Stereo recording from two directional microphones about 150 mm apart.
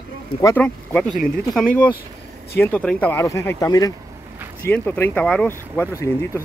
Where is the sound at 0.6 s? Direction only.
5° left (ahead or behind); by 3.9 s 25° left (ahead or behind).